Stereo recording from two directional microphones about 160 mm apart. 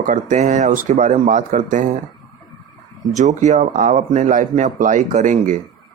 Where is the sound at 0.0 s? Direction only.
50° right (ahead or behind).